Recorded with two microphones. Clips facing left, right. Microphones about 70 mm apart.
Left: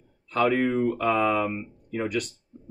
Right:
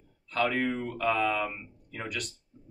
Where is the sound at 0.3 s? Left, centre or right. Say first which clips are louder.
Left 6 dB; centre.